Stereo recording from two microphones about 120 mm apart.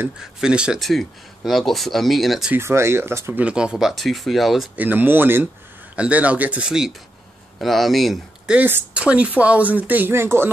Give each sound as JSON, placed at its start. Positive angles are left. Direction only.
{"t": 0.2, "sound": "speech", "side_deg": -5}
{"t": 2.5, "sound": "speech", "side_deg": -20}
{"t": 4.7, "sound": "speech", "side_deg": -15}
{"t": 8.5, "sound": "speech", "side_deg": -15}